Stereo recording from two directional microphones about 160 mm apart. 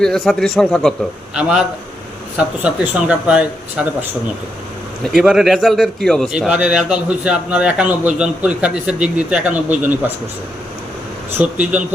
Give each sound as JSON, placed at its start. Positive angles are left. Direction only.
{"t": 0.0, "sound": "a man's voice", "side_deg": 5}
{"t": 2.6, "sound": "speech", "side_deg": -10}
{"t": 5.1, "sound": "a man's voice", "side_deg": 0}
{"t": 11.4, "sound": "speech", "side_deg": -10}